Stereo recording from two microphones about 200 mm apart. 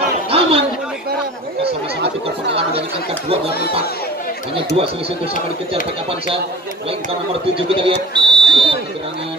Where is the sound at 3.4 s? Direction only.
50° left (ahead or behind).